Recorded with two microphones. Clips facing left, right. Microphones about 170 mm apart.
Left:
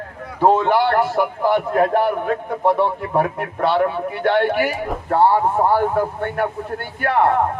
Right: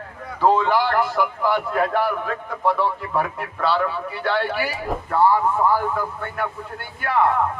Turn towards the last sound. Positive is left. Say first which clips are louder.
# left 3 dB
turn(degrees=50)  # may be behind; listen again after turning